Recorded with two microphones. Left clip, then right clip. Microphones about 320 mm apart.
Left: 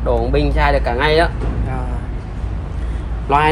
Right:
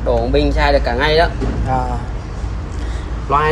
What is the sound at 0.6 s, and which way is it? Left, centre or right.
Speech, left.